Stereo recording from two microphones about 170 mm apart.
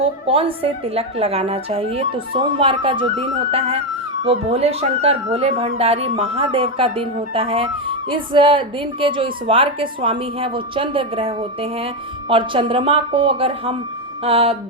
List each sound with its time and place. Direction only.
0.0 s a woman's voice: 35° right (ahead or behind)